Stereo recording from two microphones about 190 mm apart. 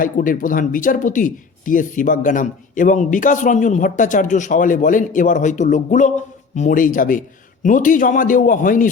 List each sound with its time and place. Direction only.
0.0 s speech: 45° left (ahead or behind)